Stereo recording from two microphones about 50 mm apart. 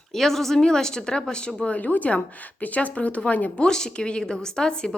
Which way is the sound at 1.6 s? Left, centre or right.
Left.